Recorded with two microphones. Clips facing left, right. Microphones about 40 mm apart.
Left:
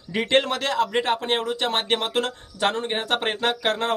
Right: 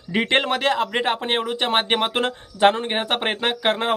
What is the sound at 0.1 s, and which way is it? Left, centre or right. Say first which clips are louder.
Speech: right 1 dB; right.